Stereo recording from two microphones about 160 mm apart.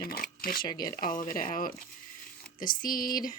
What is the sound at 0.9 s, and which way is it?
Speech, 60° left (ahead or behind).